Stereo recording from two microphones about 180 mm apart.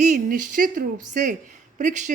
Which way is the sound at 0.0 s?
45° right (ahead or behind).